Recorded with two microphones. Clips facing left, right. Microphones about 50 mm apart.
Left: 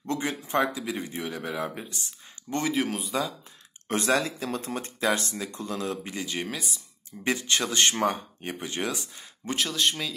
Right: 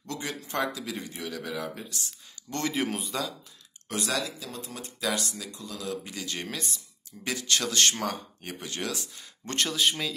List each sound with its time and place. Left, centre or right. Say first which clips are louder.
0.0 s speech: left 5 dB; left
2.7 s speech: left 2 dB; centre
3.9 s speech: left 6 dB; left
6.2 s speech: left 2 dB; centre
7.1 s speech: left 3 dB; left
9.5 s speech: even; centre